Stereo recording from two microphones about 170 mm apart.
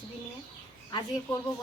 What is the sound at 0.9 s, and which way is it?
Speech, 25° left (ahead or behind).